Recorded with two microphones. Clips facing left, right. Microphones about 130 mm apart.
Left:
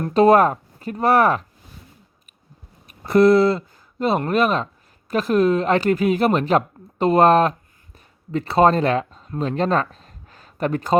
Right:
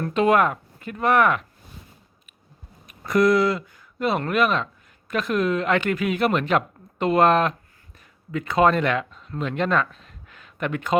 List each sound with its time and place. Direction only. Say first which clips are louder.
0.0 s speech: left 5 dB; 35° left (ahead or behind)
3.0 s speech: left 5 dB; 30° left (ahead or behind)